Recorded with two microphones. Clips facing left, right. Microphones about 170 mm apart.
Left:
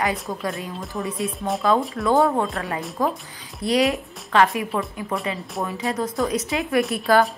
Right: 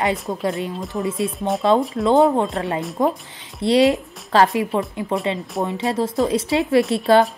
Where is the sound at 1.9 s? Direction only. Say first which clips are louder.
Right 4 dB; 20° right (ahead or behind).